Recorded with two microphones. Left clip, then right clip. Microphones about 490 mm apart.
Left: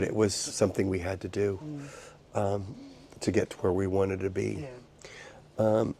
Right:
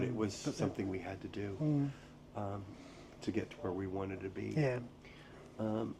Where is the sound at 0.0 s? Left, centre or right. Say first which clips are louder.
Left 10 dB; left.